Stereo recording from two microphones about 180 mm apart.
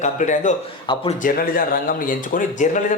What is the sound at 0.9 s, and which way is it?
Speech, 25° left (ahead or behind).